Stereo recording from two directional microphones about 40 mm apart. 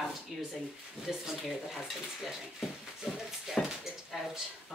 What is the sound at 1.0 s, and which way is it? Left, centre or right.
Speech, centre.